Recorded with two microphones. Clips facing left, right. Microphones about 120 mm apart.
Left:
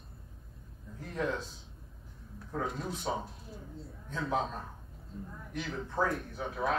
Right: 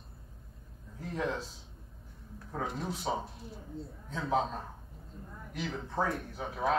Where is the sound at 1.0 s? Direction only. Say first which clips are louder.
Even; centre (ahead or behind).